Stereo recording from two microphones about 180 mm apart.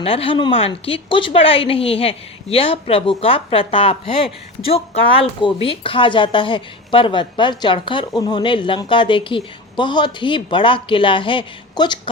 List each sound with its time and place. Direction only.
0.0 s a woman's voice: 30° left (ahead or behind)